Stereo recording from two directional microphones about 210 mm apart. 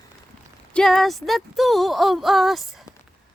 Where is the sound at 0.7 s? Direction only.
5° left (ahead or behind).